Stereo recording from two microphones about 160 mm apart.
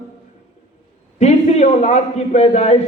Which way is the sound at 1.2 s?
45° left (ahead or behind).